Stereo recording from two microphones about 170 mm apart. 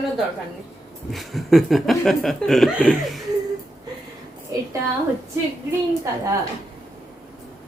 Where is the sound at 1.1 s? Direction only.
Centre (ahead or behind).